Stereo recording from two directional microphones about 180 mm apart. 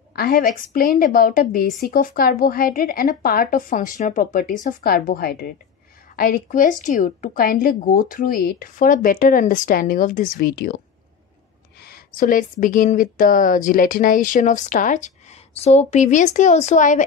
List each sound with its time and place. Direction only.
0.1 s a woman's voice: 55° left (ahead or behind)
11.8 s a woman's voice: 55° left (ahead or behind)